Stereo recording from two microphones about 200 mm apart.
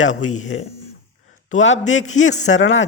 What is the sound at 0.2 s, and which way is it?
Speech, 90° left.